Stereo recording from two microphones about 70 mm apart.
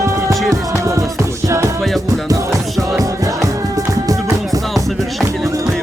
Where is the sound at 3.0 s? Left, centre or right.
Right.